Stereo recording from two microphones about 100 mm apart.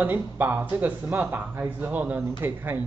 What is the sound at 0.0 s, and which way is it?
A man's voice, 20° right (ahead or behind).